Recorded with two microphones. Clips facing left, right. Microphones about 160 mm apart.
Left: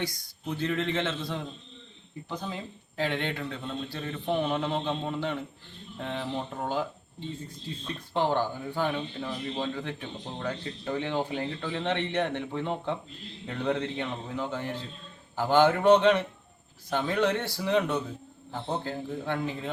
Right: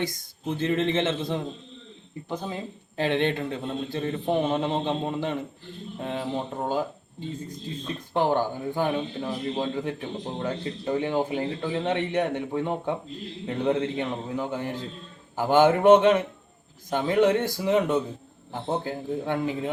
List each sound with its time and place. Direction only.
0.0 s a man's voice: 20° right (ahead or behind)
7.9 s a man's voice: 15° right (ahead or behind)